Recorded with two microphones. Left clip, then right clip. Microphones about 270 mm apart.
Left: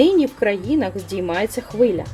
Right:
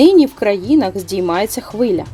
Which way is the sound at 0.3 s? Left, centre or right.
Right.